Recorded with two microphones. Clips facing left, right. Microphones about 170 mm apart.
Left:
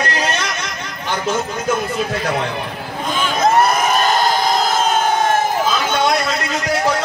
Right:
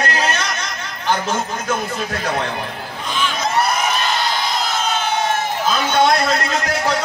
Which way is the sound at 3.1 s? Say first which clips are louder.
Left 5 dB; 50° left (ahead or behind).